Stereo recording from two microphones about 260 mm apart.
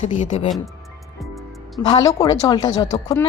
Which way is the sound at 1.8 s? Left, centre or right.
Centre.